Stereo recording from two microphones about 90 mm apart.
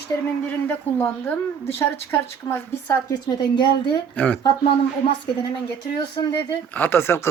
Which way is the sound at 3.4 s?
50° left (ahead or behind).